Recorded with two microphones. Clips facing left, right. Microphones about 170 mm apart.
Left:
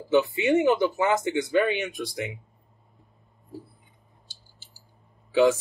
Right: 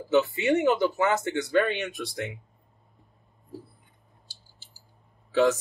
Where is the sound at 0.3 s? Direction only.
20° left (ahead or behind).